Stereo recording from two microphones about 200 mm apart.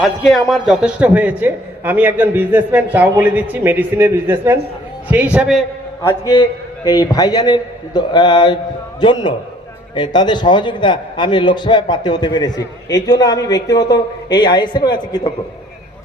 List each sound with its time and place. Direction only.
0.0 s a man's voice: centre (ahead or behind)
6.0 s a man's voice: 15° left (ahead or behind)